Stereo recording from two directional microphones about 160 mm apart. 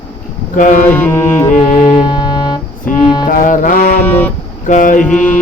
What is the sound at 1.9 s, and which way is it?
Music, 30° left (ahead or behind).